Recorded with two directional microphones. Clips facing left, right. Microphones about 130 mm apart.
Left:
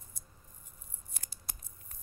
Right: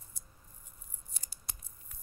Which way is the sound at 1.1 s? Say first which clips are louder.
Left 1 dB; 55° left (ahead or behind).